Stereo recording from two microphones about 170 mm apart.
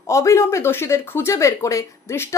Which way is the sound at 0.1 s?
20° left (ahead or behind).